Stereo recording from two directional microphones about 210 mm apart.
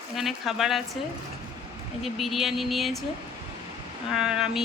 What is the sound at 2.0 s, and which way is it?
A woman's voice, centre (ahead or behind).